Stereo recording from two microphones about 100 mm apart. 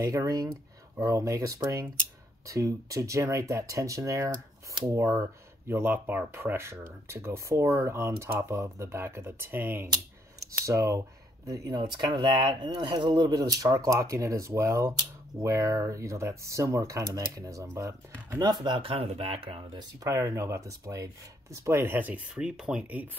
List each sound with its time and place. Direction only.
0.0 s speech: 35° right (ahead or behind)
18.4 s speech: 45° right (ahead or behind); by 19.6 s 75° right (ahead or behind)
20.0 s speech: 30° right (ahead or behind); by 23.0 s 15° right (ahead or behind)